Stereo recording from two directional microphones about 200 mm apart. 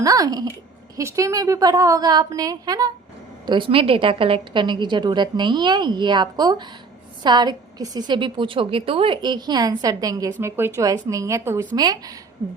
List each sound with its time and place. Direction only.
0.0 s a woman's voice: 20° right (ahead or behind)